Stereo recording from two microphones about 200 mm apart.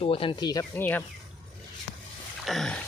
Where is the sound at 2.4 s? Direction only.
Centre (ahead or behind).